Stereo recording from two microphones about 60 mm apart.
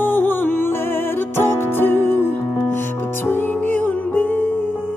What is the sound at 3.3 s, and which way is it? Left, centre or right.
Music, left.